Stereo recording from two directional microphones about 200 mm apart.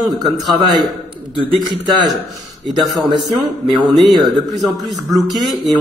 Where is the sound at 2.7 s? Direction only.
Centre (ahead or behind).